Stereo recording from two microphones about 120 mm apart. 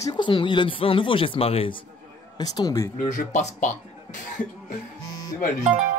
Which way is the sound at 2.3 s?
35° left (ahead or behind).